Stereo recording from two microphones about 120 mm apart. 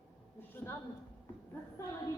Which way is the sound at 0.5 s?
20° left (ahead or behind).